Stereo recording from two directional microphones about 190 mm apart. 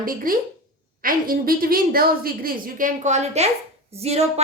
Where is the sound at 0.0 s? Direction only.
50° right (ahead or behind).